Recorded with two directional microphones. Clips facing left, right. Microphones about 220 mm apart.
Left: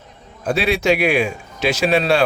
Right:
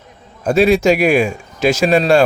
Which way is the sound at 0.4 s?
45° right (ahead or behind).